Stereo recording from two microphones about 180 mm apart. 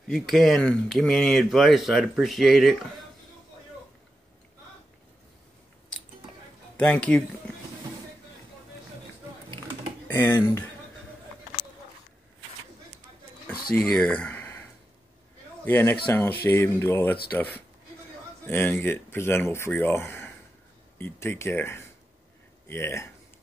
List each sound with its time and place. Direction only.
0.1 s speech: centre (ahead or behind)
6.8 s speech: 5° left (ahead or behind)
10.0 s speech: 10° left (ahead or behind)
13.5 s a sound: 55° left (ahead or behind)
13.7 s speech: centre (ahead or behind)
15.6 s speech: 10° left (ahead or behind)